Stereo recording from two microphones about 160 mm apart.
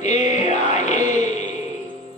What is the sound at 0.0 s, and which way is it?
Music, 45° left (ahead or behind).